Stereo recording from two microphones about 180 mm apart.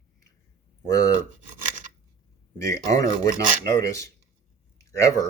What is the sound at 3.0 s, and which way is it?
Speech, 20° left (ahead or behind).